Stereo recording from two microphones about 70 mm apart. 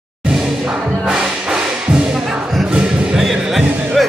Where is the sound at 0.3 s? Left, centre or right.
Centre.